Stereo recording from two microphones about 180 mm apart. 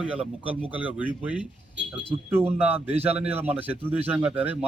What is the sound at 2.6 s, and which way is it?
Speech, 10° right (ahead or behind).